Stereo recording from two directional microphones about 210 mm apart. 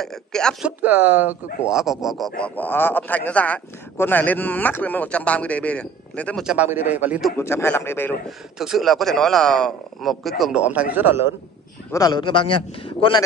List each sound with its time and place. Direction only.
0.0 s a man's voice: centre (ahead or behind)
7.3 s a man's voice: 10° left (ahead or behind)
8.5 s speech: centre (ahead or behind)
11.9 s a man's voice: 20° left (ahead or behind)